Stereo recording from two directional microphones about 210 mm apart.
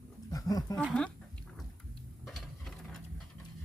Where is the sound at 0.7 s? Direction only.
5° left (ahead or behind).